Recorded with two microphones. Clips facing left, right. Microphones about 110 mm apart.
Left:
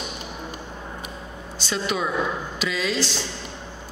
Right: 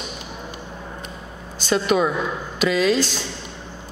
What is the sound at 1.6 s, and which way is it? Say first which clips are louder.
A man's voice: right 7 dB; 50° right (ahead or behind).